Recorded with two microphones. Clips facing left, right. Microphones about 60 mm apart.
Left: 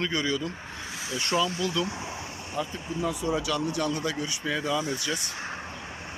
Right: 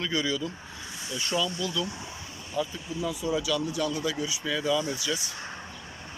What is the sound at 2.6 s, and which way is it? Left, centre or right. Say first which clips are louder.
Speech: even; left.